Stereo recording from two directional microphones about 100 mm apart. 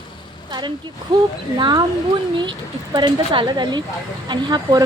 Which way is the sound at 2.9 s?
50° right (ahead or behind).